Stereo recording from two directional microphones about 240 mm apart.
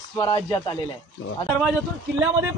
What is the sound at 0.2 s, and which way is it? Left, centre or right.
Speech, centre.